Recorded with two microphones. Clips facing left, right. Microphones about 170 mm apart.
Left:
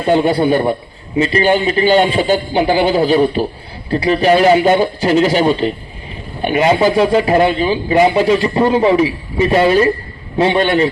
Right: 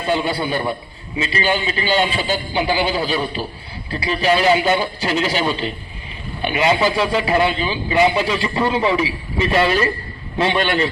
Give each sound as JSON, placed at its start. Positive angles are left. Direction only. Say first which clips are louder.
{"t": 0.0, "sound": "a man's voice", "louder": "left 8 dB", "side_deg": 55}
{"t": 9.4, "sound": "a man's voice", "louder": "left 6 dB", "side_deg": 15}